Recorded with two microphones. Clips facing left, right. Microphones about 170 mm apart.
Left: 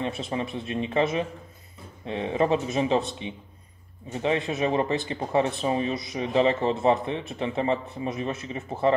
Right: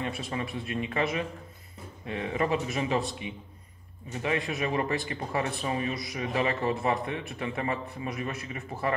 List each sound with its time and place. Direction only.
0.0 s speech: 25° left (ahead or behind)